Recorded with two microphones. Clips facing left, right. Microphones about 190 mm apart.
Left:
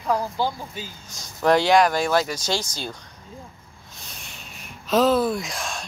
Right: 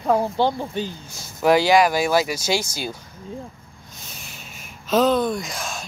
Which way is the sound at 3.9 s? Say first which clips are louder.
Right 1 dB; centre (ahead or behind).